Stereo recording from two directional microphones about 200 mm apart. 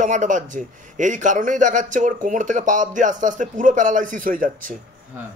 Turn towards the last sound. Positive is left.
turn(degrees=-45)  # may be behind; listen again after turning